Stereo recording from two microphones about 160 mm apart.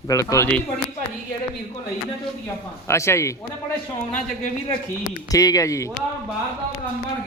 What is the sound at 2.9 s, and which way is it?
Speech, 15° left (ahead or behind).